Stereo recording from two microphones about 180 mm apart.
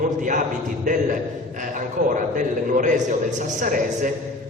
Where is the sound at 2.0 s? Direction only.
50° right (ahead or behind).